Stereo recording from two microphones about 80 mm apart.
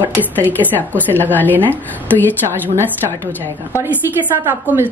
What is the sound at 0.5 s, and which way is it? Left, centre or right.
A woman's voice, left.